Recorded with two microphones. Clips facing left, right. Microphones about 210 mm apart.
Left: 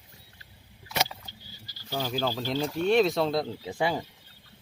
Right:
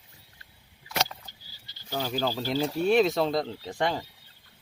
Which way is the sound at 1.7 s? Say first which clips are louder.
Left 3 dB; 25° right (ahead or behind).